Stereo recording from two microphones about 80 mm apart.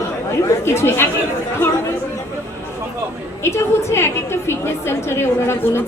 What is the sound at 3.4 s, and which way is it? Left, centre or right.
A woman's voice, left.